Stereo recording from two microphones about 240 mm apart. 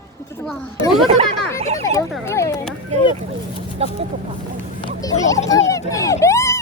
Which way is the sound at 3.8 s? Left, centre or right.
Right.